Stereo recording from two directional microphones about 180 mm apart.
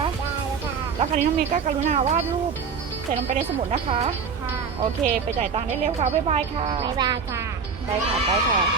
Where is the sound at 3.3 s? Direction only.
35° right (ahead or behind).